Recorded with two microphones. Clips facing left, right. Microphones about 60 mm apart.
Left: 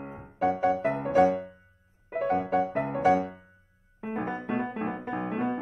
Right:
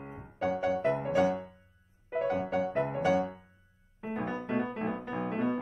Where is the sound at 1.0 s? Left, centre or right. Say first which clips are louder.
Left 8 dB; centre.